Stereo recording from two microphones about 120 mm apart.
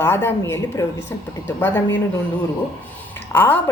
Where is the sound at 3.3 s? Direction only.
15° left (ahead or behind).